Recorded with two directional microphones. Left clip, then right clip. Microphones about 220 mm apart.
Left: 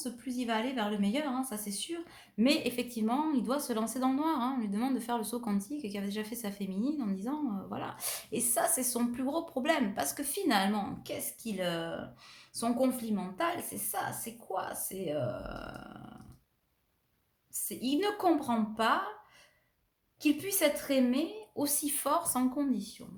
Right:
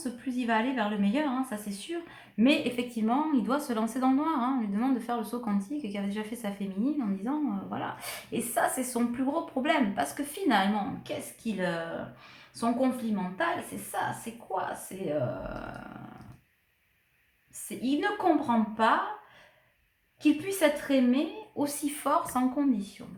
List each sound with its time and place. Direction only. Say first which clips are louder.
0.0 s a woman's voice: right 4 dB; 40° left (ahead or behind)
14.5 s a woman's voice: right 3 dB; 40° left (ahead or behind)
17.8 s a woman's voice: right 2 dB; 40° left (ahead or behind)
20.2 s a woman's voice: right 4 dB; 40° left (ahead or behind)